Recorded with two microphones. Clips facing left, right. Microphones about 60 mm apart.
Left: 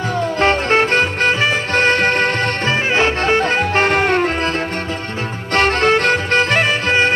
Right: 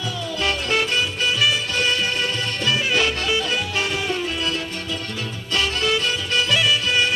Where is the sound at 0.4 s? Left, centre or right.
Left.